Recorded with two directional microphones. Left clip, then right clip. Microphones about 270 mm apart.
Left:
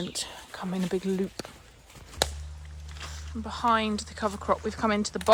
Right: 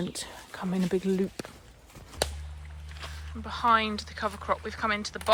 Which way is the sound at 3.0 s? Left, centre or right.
Centre.